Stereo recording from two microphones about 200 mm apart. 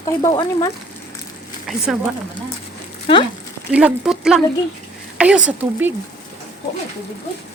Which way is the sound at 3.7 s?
5° right (ahead or behind).